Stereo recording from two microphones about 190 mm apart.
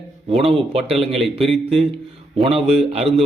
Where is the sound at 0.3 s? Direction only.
30° right (ahead or behind).